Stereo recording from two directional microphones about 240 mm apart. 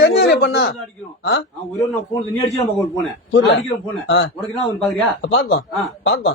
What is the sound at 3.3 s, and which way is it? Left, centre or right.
Speech, left.